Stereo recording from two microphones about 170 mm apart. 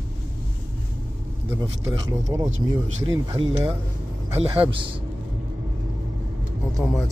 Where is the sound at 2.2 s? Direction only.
20° right (ahead or behind).